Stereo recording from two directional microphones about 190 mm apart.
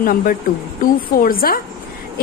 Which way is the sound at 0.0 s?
50° left (ahead or behind).